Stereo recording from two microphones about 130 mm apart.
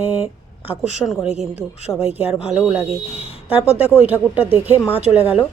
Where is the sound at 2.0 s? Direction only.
15° right (ahead or behind).